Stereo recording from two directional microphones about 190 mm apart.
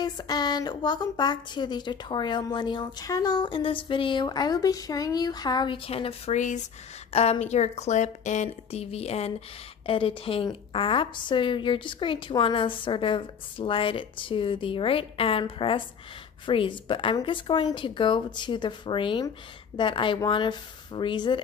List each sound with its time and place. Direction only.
0.0 s a woman's voice: 20° left (ahead or behind)